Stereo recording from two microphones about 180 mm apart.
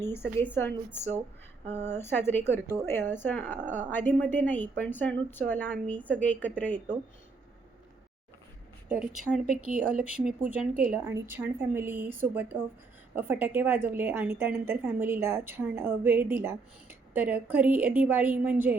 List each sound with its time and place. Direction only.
0.0 s a woman's voice: 15° left (ahead or behind)
8.9 s speech: 5° right (ahead or behind)
9.6 s speech: 50° right (ahead or behind)
10.0 s a woman's voice: 10° right (ahead or behind)